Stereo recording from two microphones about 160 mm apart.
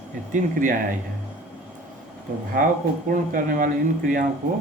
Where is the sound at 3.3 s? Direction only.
60° right (ahead or behind).